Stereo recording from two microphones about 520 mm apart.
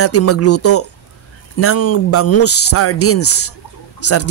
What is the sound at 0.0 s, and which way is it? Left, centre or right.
Speech, left.